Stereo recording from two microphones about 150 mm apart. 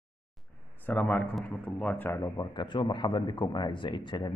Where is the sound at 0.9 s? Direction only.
10° left (ahead or behind).